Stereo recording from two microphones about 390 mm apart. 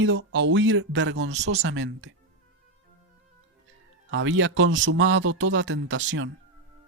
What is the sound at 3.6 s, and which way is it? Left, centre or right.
Speech, right.